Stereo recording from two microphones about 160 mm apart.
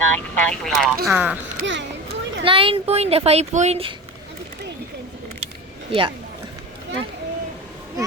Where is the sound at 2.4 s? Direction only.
35° right (ahead or behind).